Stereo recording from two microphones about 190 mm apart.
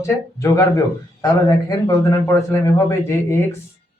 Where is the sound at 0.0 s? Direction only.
15° left (ahead or behind).